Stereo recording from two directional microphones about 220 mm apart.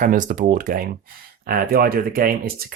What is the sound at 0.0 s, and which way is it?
Speech, 35° right (ahead or behind).